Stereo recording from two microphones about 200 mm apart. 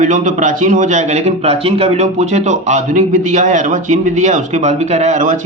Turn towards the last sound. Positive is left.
turn(degrees=-40)  # may be behind; listen again after turning